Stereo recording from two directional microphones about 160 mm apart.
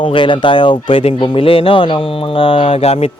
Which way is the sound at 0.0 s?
30° left (ahead or behind).